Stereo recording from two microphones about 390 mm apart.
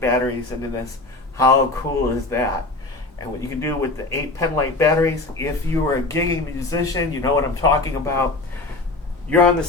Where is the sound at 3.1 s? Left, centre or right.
Centre.